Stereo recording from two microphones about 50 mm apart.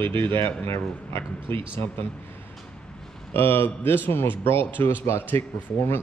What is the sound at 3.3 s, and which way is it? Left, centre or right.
Speech, left.